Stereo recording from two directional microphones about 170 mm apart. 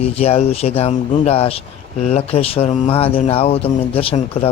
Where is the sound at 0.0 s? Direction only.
35° left (ahead or behind).